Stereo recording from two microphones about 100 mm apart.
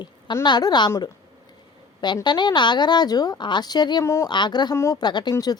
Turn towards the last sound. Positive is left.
turn(degrees=45)  # may be behind; listen again after turning